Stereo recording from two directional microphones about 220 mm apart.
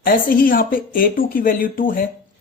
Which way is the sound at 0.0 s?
40° left (ahead or behind).